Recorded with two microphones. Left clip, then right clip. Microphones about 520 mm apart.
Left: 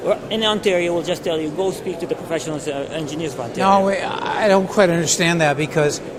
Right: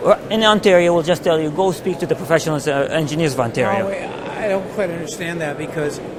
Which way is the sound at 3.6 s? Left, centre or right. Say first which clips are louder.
Left 4 dB; left.